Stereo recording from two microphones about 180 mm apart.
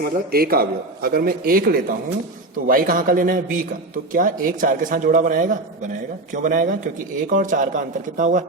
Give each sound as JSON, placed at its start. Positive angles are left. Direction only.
{"t": 0.0, "sound": "a man's voice", "side_deg": -55}